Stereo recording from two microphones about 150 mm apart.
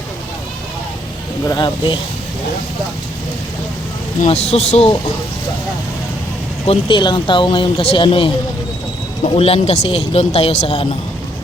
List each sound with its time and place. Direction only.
1.5 s speech: 30° left (ahead or behind)
4.3 s speech: 45° left (ahead or behind)
6.7 s speech: 35° left (ahead or behind)